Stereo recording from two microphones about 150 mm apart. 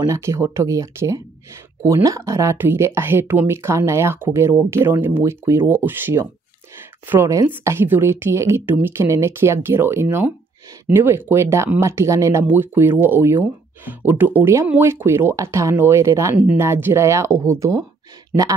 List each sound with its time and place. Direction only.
0.0 s speech: 20° right (ahead or behind)